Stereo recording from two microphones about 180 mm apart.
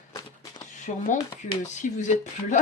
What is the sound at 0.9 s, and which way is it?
Speech, 45° left (ahead or behind).